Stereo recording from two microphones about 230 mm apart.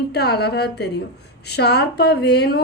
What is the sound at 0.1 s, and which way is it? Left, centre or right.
Speech, left.